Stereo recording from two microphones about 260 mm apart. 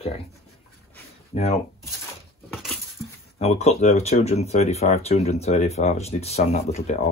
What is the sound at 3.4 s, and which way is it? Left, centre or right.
Speech, left.